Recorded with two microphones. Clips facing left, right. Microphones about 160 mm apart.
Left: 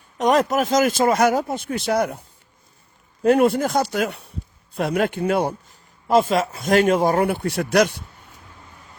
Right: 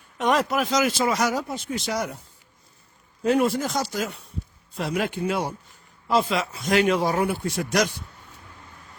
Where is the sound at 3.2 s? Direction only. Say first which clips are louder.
Left 5 dB; 55° left (ahead or behind).